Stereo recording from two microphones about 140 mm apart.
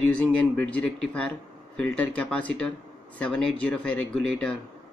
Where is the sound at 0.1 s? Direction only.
10° left (ahead or behind).